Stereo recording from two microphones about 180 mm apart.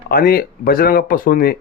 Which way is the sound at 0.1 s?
55° left (ahead or behind).